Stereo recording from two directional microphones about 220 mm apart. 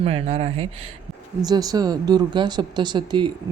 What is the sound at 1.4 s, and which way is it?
Speech, 15° right (ahead or behind).